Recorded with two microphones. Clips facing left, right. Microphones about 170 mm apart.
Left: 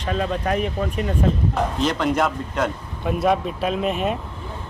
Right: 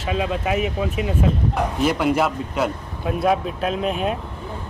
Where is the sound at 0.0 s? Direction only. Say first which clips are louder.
Even; 5° right (ahead or behind).